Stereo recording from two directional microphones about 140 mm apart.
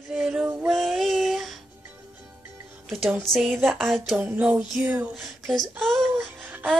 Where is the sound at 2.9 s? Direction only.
Centre (ahead or behind).